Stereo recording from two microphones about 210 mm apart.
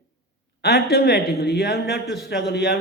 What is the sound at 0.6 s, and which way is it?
A man's voice, 50° left (ahead or behind).